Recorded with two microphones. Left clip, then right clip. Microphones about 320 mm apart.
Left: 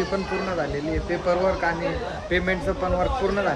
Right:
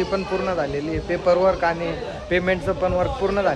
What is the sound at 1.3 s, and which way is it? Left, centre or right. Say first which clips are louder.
Speech: right 5 dB; centre.